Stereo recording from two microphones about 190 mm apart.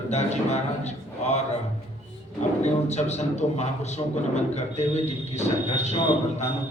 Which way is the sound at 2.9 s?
35° left (ahead or behind).